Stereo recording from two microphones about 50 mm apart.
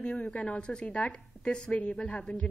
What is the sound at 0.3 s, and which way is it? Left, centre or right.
A woman's voice, left.